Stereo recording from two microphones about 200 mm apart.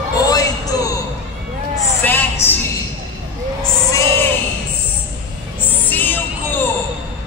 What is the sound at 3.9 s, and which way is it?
Music, 15° left (ahead or behind).